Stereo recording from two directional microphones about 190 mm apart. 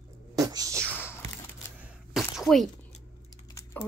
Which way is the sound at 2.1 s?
Centre (ahead or behind).